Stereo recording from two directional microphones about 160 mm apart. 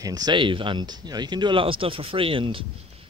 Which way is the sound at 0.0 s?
25° right (ahead or behind).